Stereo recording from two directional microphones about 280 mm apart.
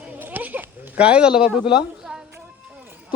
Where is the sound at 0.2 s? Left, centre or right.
Centre.